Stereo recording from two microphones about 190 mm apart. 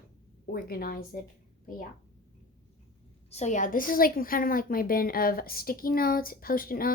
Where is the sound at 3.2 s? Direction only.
35° left (ahead or behind).